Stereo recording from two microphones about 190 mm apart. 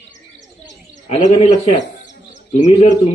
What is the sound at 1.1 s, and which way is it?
A man's voice, 35° left (ahead or behind).